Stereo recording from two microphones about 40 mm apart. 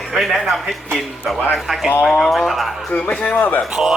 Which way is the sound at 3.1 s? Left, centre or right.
Left.